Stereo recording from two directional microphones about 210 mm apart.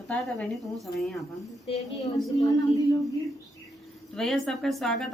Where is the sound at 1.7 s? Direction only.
30° left (ahead or behind).